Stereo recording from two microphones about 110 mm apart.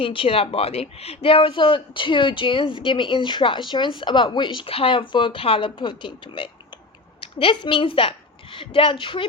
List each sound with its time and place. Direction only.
0.0 s a woman's voice: 55° left (ahead or behind)